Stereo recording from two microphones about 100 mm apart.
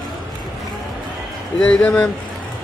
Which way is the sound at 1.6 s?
15° left (ahead or behind).